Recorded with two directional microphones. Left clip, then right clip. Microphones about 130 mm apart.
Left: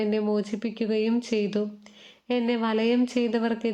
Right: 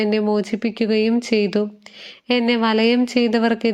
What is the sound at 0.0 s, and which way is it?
Speech, 25° right (ahead or behind).